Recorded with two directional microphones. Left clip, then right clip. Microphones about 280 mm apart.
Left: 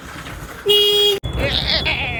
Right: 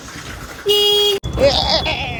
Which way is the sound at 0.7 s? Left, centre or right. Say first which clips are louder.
Even; right.